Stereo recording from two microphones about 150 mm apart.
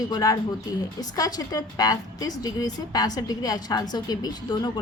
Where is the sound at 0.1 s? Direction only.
25° left (ahead or behind).